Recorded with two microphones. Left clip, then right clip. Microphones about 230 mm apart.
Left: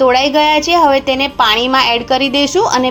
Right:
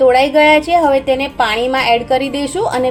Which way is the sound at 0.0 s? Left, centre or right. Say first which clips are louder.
Right 1 dB; left.